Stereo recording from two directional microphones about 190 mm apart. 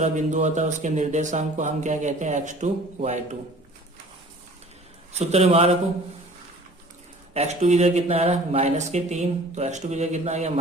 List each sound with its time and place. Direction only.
0.0 s speech: 40° right (ahead or behind)
5.1 s speech: 35° right (ahead or behind)
7.3 s speech: 35° right (ahead or behind)